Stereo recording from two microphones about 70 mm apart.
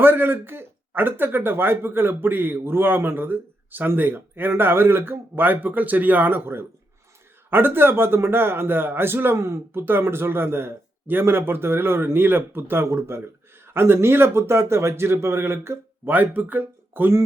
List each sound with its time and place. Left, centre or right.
0.0 s speech: right